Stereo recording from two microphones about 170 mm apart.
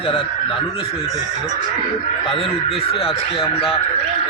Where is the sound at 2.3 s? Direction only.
30° left (ahead or behind).